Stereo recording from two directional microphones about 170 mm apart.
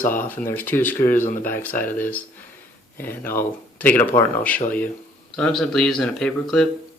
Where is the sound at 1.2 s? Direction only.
50° left (ahead or behind).